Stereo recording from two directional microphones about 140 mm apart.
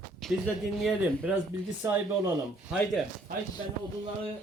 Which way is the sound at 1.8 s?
20° right (ahead or behind).